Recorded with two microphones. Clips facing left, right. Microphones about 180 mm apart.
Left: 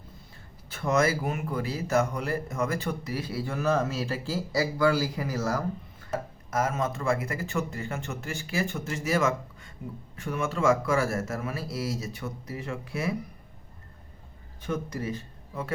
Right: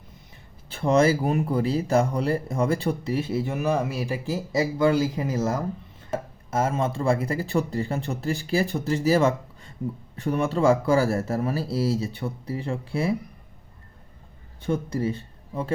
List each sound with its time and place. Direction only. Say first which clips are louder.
0.7 s speech: right 5 dB; 30° right (ahead or behind)
14.6 s speech: right 6 dB; 30° right (ahead or behind)